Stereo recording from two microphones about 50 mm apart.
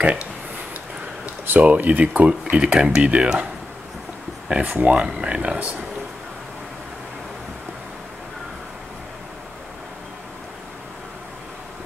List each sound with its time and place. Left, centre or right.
1.6 s speech: right
4.5 s speech: right